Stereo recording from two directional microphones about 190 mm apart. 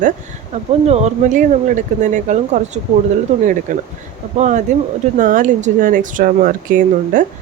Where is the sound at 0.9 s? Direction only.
40° right (ahead or behind).